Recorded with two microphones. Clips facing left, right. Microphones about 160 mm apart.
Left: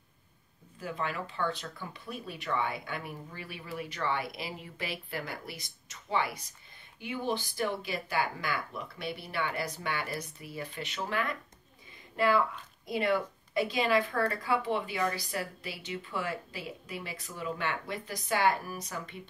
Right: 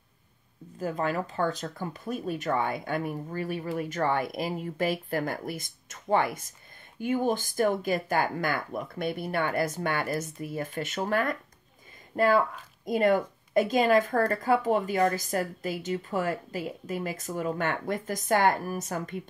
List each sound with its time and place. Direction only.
0.7 s a woman's voice: 45° right (ahead or behind)